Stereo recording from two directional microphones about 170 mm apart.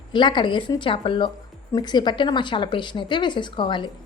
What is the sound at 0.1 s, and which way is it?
Speech, 25° left (ahead or behind).